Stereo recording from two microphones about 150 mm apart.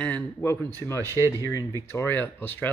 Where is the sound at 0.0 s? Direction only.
10° left (ahead or behind).